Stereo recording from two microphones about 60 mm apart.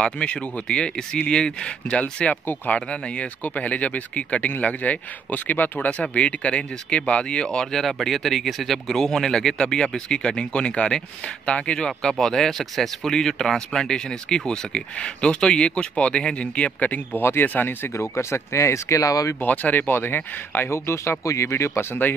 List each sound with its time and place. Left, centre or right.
0.0 s speech: centre
2.4 s speech: left
17.9 s speech: left
19.4 s speech: left